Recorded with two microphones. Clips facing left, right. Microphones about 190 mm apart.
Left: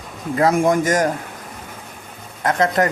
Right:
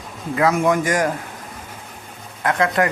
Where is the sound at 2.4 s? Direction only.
40° left (ahead or behind).